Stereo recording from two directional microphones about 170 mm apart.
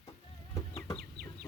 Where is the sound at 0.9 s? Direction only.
65° right (ahead or behind).